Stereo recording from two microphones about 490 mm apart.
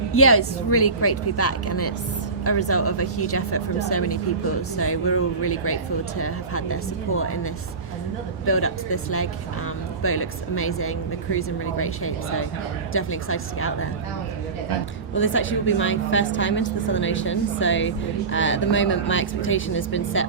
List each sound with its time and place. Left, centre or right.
0.1 s a woman's voice: left
8.4 s a woman's voice: left
15.1 s a woman's voice: left